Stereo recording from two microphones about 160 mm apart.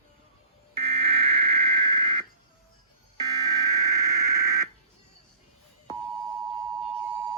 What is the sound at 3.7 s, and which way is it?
Radio, 20° right (ahead or behind).